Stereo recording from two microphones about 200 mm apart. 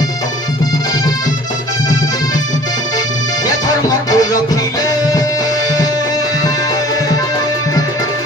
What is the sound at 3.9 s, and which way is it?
Music, 20° left (ahead or behind).